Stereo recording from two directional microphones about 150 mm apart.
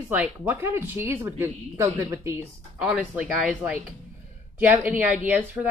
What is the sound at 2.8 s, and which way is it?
Speech, 5° right (ahead or behind).